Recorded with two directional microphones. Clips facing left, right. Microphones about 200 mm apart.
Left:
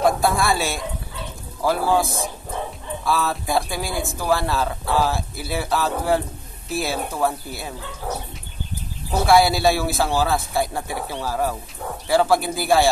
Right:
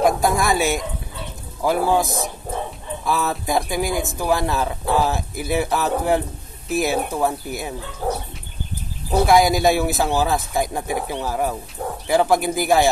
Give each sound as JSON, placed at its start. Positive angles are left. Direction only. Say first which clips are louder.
{"t": 0.0, "sound": "a man's voice", "louder": "right 1 dB", "side_deg": -15}
{"t": 9.1, "sound": "a man's voice", "louder": "right 1 dB", "side_deg": -15}